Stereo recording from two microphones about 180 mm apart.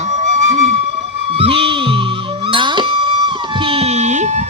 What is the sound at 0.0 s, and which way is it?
Music, 35° right (ahead or behind).